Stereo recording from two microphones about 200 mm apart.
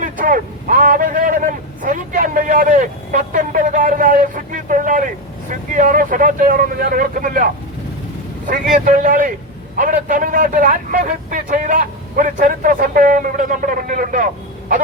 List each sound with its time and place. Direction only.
0.0 s speech: 45° right (ahead or behind)
8.4 s a man's voice: 40° right (ahead or behind)